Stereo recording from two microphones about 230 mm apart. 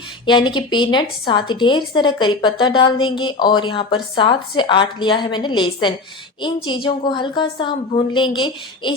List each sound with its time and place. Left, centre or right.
0.3 s speech: centre